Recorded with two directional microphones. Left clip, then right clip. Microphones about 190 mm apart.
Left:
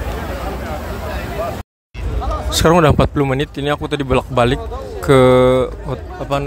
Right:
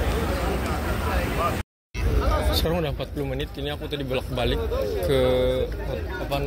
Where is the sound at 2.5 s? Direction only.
55° left (ahead or behind).